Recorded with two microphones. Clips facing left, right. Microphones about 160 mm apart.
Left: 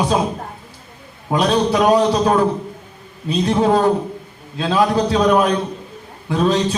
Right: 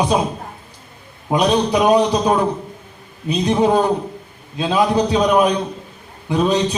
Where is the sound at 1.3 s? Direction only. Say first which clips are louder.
Even; 15° right (ahead or behind).